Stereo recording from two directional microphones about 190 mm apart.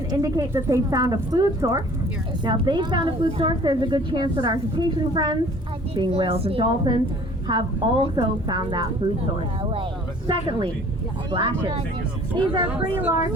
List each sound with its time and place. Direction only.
0.1 s speech: 20° right (ahead or behind)
10.2 s speech: 25° right (ahead or behind)
12.6 s speech: 10° right (ahead or behind)